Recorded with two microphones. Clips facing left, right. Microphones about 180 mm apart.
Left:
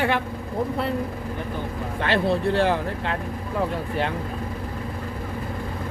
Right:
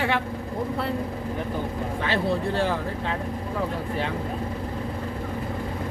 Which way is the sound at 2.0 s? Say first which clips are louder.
Left 4 dB; 70° left (ahead or behind).